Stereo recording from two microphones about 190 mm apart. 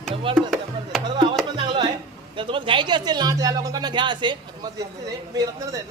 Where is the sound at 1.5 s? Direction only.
25° right (ahead or behind).